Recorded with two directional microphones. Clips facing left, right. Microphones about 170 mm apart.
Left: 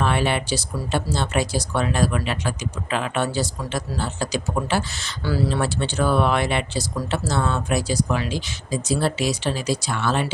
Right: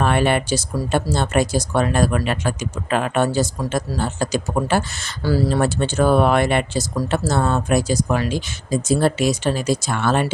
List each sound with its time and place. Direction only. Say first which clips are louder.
0.0 s speech: right 4 dB; 50° right (ahead or behind)